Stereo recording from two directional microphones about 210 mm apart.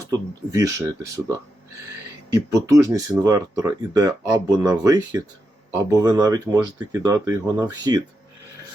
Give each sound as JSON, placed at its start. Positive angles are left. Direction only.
{"t": 0.6, "sound": "speech", "side_deg": -15}
{"t": 2.3, "sound": "speech", "side_deg": -15}